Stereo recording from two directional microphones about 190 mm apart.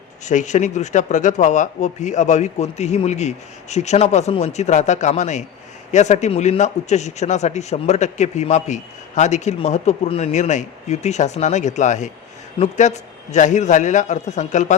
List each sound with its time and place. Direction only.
0.3 s speech: 40° left (ahead or behind)